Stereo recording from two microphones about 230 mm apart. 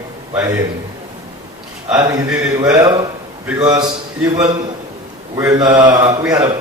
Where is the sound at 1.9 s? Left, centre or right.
Centre.